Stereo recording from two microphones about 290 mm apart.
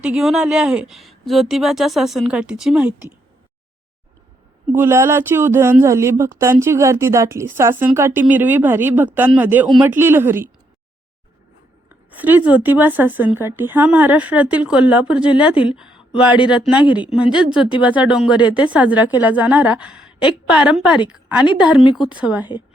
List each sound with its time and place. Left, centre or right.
0.0 s a woman's voice: centre
4.7 s speech: centre
11.9 s a woman's voice: centre
15.5 s speech: centre
15.8 s a woman's voice: centre
17.5 s speech: centre
17.8 s a woman's voice: centre
21.8 s speech: centre
22.2 s a woman's voice: centre